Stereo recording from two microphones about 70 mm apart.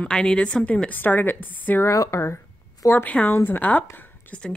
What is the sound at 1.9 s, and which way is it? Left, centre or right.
Speech, left.